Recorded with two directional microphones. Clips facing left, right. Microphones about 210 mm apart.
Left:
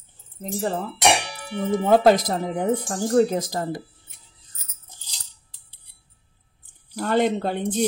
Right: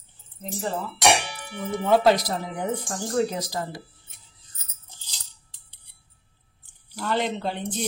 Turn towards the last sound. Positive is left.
turn(degrees=50)  # may be behind; listen again after turning